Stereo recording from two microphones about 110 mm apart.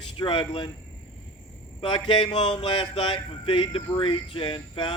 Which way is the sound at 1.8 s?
50° left (ahead or behind).